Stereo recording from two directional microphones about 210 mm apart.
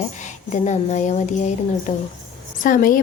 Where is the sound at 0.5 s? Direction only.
35° left (ahead or behind).